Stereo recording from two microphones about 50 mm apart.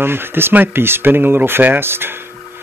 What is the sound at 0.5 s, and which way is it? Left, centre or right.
Speech, right.